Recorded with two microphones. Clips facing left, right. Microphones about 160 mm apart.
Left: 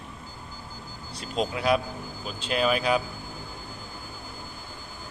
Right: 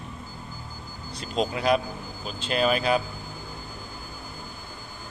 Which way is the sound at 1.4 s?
5° left (ahead or behind).